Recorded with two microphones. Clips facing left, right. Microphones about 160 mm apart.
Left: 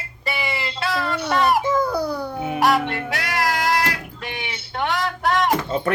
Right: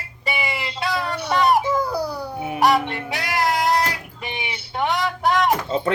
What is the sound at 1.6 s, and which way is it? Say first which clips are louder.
Babbling: left 2 dB; 10° right (ahead or behind).